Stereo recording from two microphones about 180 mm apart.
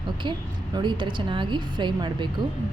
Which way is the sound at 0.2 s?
25° right (ahead or behind).